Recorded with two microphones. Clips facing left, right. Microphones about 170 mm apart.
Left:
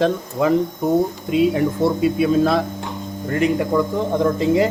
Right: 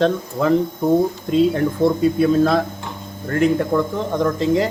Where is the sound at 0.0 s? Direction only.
5° left (ahead or behind).